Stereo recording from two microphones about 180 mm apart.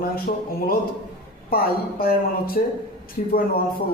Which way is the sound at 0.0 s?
55° left (ahead or behind).